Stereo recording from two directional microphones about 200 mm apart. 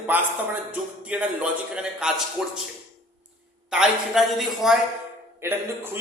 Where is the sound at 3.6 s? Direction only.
5° right (ahead or behind).